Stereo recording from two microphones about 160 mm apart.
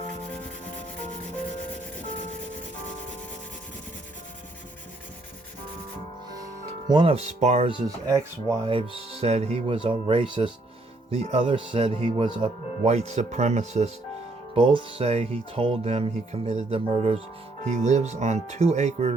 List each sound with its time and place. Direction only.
6.9 s speech: 35° right (ahead or behind)
7.9 s speech: 20° right (ahead or behind)
8.6 s speech: 35° right (ahead or behind)
12.9 s speech: 45° right (ahead or behind)
14.5 s speech: 35° right (ahead or behind)